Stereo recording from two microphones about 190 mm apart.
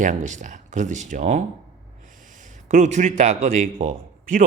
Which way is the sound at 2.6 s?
40° right (ahead or behind).